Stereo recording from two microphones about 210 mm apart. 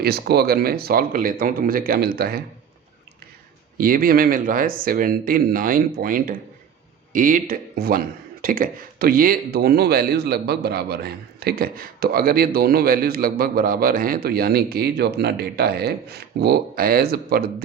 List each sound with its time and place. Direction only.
0.0 s speech: 50° right (ahead or behind)
3.8 s speech: 45° right (ahead or behind)